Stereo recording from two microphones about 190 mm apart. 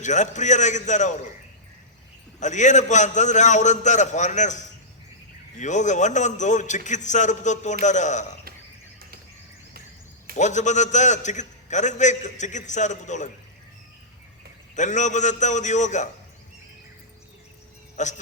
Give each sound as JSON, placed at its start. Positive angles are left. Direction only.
{"t": 0.0, "sound": "a man's voice", "side_deg": 40}
{"t": 2.4, "sound": "a man's voice", "side_deg": 40}
{"t": 10.3, "sound": "a man's voice", "side_deg": 40}
{"t": 14.8, "sound": "a man's voice", "side_deg": 40}
{"t": 18.0, "sound": "a man's voice", "side_deg": 40}